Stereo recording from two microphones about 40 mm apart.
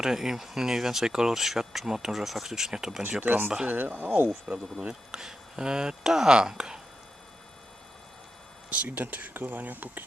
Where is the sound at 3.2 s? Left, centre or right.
Right.